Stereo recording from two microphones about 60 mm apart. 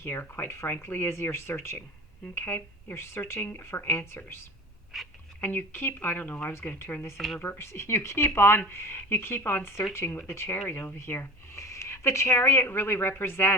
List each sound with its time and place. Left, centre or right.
0.0 s speech: left
4.9 s speech: centre
5.4 s speech: left
6.7 s speech: left